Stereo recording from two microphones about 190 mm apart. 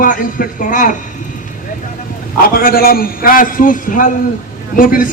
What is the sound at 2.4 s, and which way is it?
A man's voice, 50° left (ahead or behind).